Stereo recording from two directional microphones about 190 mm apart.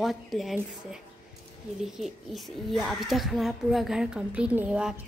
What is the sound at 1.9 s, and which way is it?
Speech, centre (ahead or behind).